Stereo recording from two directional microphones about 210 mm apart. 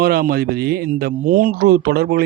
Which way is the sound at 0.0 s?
45° right (ahead or behind).